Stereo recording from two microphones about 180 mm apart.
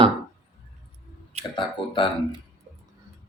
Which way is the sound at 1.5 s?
25° left (ahead or behind).